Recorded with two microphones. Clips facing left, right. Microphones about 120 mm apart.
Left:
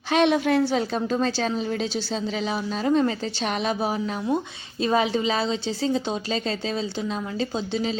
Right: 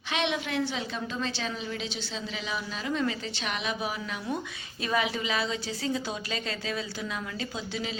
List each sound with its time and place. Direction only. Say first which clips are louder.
0.1 s a woman's voice: left 10 dB; 40° left (ahead or behind)